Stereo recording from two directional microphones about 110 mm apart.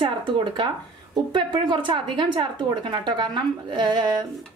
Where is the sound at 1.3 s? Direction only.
45° right (ahead or behind).